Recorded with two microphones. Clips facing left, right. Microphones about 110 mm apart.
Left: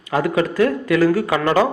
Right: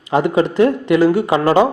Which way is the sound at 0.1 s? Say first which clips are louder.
Right 4 dB; 25° right (ahead or behind).